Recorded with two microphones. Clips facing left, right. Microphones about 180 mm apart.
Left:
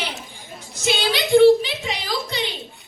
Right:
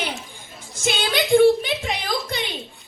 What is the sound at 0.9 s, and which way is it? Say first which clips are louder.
Music: left 1 dB; 50° right (ahead or behind).